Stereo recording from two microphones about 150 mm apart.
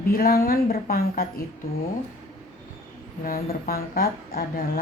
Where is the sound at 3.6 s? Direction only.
75° left (ahead or behind).